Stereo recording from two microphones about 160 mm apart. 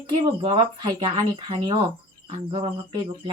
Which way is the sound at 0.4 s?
30° right (ahead or behind).